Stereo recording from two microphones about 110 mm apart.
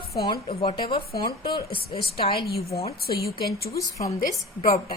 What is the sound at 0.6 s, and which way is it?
A woman's voice, 55° left (ahead or behind).